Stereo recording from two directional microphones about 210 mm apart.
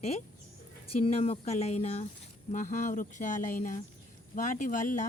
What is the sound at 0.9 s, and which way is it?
Speech, 25° left (ahead or behind).